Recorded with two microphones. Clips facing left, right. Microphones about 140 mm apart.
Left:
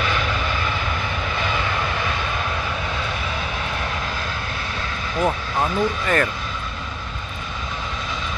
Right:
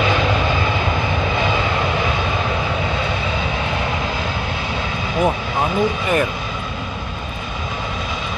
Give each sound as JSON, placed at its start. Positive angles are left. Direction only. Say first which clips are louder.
{"t": 0.0, "sound": "vehicle", "louder": "right 6 dB", "side_deg": -20}
{"t": 5.2, "sound": "speech", "louder": "right 2 dB", "side_deg": -15}